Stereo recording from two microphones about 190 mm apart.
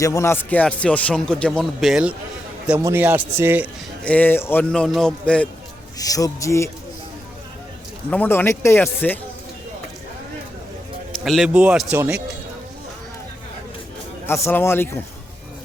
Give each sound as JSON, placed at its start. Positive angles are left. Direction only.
{"t": 0.0, "sound": "a man's voice", "side_deg": 15}
{"t": 4.0, "sound": "speech", "side_deg": 10}
{"t": 6.0, "sound": "speech", "side_deg": 20}
{"t": 8.1, "sound": "speech", "side_deg": 10}
{"t": 11.1, "sound": "a man's voice", "side_deg": 0}
{"t": 14.3, "sound": "speech", "side_deg": 15}